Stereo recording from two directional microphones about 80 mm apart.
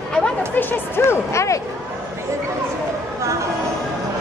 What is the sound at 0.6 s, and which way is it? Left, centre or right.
Speech, left.